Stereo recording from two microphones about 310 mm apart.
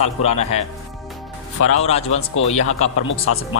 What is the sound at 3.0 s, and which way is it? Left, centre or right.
Speech, left.